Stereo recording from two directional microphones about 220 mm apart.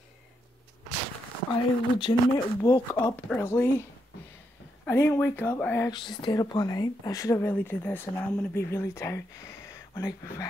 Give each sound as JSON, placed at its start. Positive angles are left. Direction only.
{"t": 1.5, "sound": "speech", "side_deg": 20}
{"t": 4.8, "sound": "speech", "side_deg": 10}
{"t": 5.9, "sound": "speech", "side_deg": 20}